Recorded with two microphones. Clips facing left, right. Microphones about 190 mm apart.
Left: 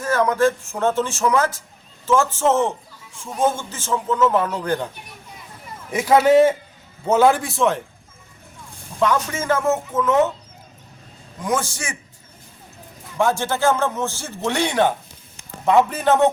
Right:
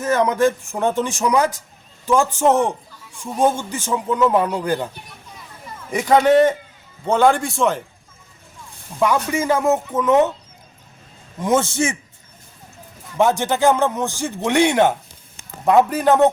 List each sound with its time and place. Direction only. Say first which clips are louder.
0.0 s speech: right 1 dB; 20° right (ahead or behind)
5.9 s a man's voice: even; 5° left (ahead or behind)
9.0 s speech: right 2 dB; 10° right (ahead or behind)
11.4 s a man's voice: right 6 dB; 25° right (ahead or behind)
13.1 s speech: right 3 dB; 20° right (ahead or behind)